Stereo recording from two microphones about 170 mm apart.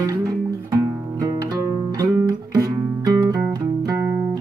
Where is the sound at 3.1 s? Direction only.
20° right (ahead or behind).